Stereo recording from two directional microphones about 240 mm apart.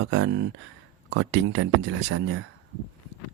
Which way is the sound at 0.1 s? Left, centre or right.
Right.